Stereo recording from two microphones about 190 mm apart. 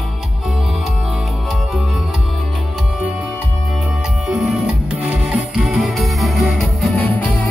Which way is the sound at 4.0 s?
Centre (ahead or behind).